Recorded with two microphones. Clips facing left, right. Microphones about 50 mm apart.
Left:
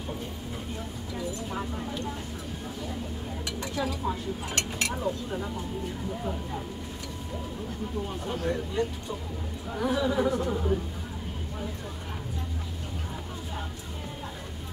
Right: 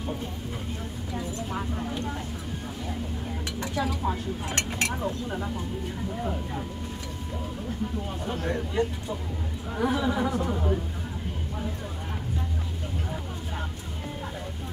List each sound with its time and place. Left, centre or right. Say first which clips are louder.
1.5 s speech: right 2 dB; centre
3.8 s speech: right 1 dB; centre
4.5 s speech: right 3 dB; right
5.0 s speech: even; centre
8.3 s speech: right 1 dB; right